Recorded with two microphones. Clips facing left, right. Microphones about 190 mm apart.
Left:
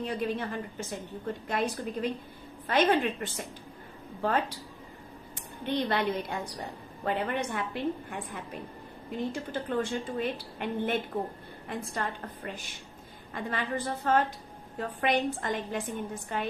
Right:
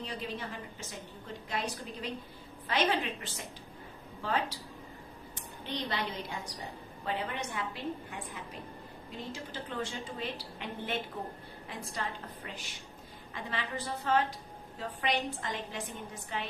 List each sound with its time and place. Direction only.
0.0 s a woman's voice: 55° left (ahead or behind)
5.6 s a woman's voice: 55° left (ahead or behind)